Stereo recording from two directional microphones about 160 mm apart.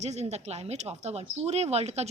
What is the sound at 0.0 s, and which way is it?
Speech, 45° right (ahead or behind).